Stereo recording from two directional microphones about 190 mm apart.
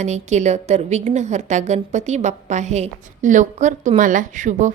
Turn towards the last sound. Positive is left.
turn(degrees=-40)  # may be behind; listen again after turning